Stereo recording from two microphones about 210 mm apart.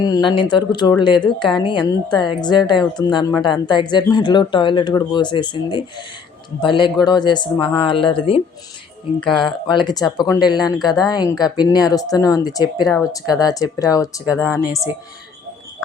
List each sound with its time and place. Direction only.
0.0 s speech: 20° left (ahead or behind)
9.3 s speech: centre (ahead or behind)
9.7 s speech: 20° left (ahead or behind)